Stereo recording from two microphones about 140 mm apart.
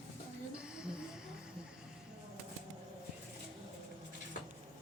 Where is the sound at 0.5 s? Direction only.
5° right (ahead or behind).